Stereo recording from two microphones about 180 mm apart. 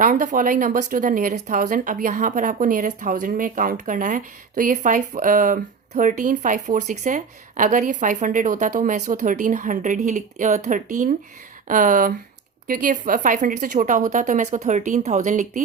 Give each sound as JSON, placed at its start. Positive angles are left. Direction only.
{"t": 0.0, "sound": "speech", "side_deg": -45}